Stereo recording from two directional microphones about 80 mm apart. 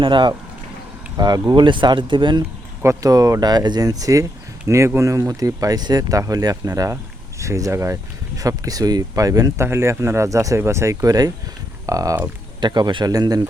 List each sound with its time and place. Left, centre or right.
0.0 s speech: right
1.1 s speech: right
2.8 s speech: right
6.9 s speech: right
8.4 s speech: right
9.6 s speech: right
12.5 s speech: right
13.1 s speech: right